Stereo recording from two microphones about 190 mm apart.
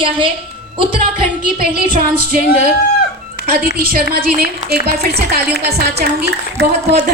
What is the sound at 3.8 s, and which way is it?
Music, 50° right (ahead or behind).